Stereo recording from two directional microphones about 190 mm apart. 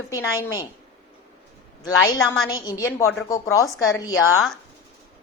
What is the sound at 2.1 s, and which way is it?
A woman's voice, 20° left (ahead or behind).